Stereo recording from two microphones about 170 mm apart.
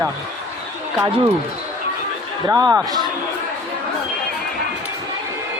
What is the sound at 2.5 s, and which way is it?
Speech, 20° right (ahead or behind).